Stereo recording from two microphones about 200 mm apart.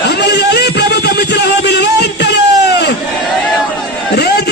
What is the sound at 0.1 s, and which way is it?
Music, 60° left (ahead or behind).